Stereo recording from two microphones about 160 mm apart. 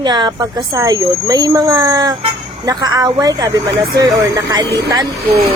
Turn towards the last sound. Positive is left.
turn(degrees=-20)  # may be behind; listen again after turning